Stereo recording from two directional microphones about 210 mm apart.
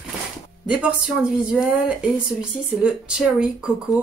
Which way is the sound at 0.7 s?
5° right (ahead or behind).